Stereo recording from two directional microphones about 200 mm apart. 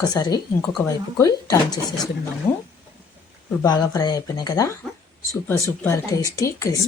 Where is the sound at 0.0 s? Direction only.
20° left (ahead or behind).